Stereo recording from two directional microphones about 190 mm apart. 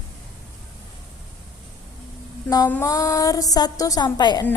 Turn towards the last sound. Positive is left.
turn(degrees=20)  # may be behind; listen again after turning